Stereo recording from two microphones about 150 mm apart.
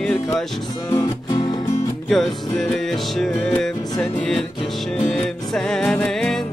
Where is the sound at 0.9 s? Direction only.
25° left (ahead or behind).